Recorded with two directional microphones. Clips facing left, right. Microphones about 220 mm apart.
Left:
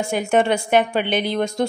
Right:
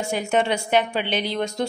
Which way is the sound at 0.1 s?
50° left (ahead or behind).